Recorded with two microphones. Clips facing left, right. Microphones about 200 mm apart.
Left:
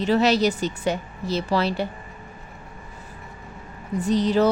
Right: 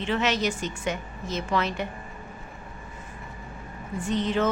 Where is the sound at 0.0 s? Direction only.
35° left (ahead or behind).